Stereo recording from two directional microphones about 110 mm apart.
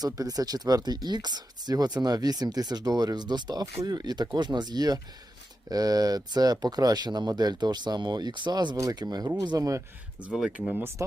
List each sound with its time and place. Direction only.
0.0 s speech: 35° right (ahead or behind)
10.2 s speech: 5° right (ahead or behind)
10.7 s speech: 20° right (ahead or behind)